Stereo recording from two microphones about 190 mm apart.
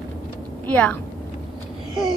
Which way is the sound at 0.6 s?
5° left (ahead or behind).